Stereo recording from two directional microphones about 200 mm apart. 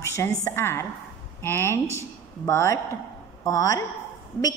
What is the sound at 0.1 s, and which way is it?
A woman's voice, 15° left (ahead or behind).